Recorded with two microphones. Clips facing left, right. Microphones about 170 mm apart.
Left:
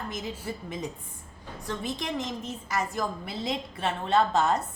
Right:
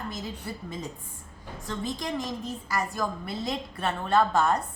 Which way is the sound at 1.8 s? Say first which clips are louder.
Right 2 dB; 20° left (ahead or behind).